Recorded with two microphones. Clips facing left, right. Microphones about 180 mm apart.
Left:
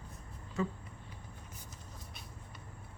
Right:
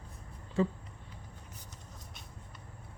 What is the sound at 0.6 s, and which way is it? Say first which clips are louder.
Speech: right 5 dB; 30° right (ahead or behind).